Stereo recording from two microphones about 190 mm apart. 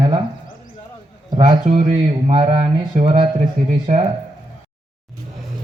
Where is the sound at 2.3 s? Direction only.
30° right (ahead or behind).